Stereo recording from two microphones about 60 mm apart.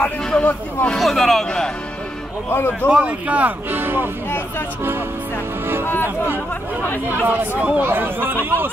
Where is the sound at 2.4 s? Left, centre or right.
Left.